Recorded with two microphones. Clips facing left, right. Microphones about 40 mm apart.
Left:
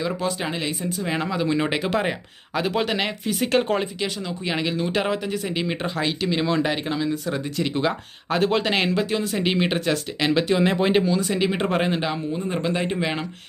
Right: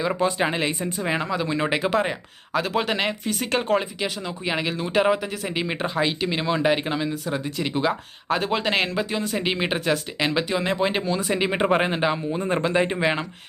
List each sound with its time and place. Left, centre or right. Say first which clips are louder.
0.2 s speech: right 4 dB; centre
1.2 s speech: left 1 dB; centre
11.0 s speech: left 2 dB; centre
12.4 s speech: right 3 dB; right
12.6 s speech: right 3 dB; centre